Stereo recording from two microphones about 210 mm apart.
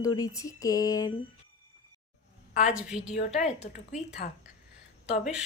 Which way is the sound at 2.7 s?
5° right (ahead or behind).